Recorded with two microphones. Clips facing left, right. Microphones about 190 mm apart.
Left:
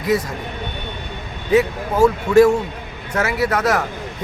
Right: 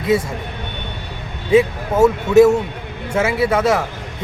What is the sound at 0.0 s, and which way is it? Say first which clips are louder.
Speech: right 2 dB; 25° right (ahead or behind).